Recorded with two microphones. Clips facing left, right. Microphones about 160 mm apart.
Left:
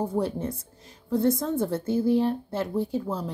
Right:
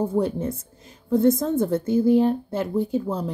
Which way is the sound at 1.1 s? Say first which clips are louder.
Right 5 dB; 20° right (ahead or behind).